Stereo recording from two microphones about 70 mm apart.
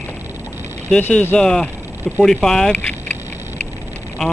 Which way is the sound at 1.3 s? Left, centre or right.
Centre.